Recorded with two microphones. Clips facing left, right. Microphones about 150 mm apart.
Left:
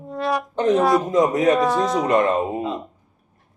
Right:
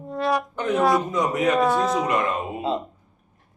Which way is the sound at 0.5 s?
30° left (ahead or behind).